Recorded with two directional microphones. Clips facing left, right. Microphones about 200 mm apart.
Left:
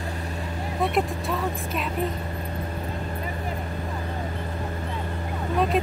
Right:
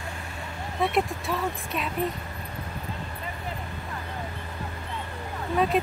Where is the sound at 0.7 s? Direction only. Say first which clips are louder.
Left 1 dB; centre (ahead or behind).